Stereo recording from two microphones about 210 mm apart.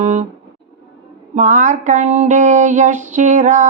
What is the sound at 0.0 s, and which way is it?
Guitar, 30° right (ahead or behind).